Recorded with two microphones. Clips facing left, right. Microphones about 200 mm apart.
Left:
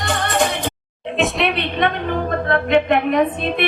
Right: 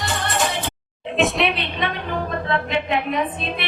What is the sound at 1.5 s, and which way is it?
A man's voice, 55° left (ahead or behind).